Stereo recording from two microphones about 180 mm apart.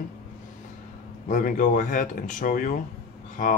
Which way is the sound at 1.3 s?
45° left (ahead or behind).